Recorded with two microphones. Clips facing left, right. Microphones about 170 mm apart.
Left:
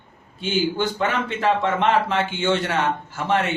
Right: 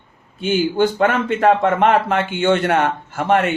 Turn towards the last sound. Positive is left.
turn(degrees=-60)  # may be behind; listen again after turning